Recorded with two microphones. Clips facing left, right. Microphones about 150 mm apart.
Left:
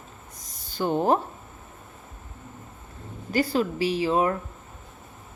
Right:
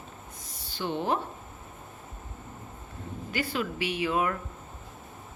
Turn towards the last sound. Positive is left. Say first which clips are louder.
# left 5 dB
turn(degrees=30)  # may be behind; listen again after turning